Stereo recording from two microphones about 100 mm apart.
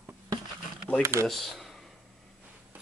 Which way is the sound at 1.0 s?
30° right (ahead or behind).